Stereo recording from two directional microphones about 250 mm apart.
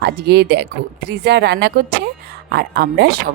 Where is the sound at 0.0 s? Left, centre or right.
Right.